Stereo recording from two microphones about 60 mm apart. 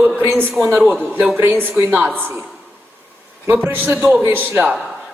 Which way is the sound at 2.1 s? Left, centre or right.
Right.